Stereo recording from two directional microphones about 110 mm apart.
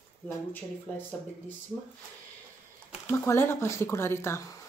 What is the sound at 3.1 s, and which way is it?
Speech, 25° left (ahead or behind).